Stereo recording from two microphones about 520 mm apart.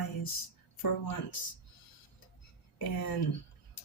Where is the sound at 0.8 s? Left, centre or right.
Left.